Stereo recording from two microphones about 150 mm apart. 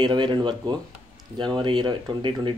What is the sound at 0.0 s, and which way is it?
Speech, 30° right (ahead or behind).